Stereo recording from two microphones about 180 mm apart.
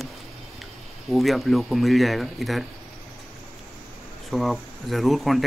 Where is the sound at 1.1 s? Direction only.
Centre (ahead or behind).